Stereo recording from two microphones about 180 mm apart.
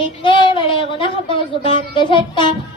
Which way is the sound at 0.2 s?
25° left (ahead or behind).